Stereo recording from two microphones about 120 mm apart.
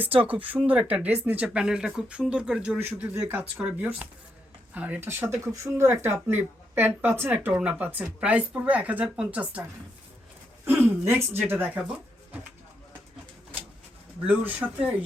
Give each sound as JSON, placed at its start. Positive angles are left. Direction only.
{"t": 0.2, "sound": "speech", "side_deg": -15}
{"t": 10.7, "sound": "speech", "side_deg": -20}
{"t": 11.8, "sound": "pigeon", "side_deg": -5}
{"t": 14.3, "sound": "speech", "side_deg": -15}